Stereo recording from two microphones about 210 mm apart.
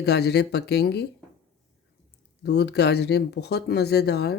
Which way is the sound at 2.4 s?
55° left (ahead or behind).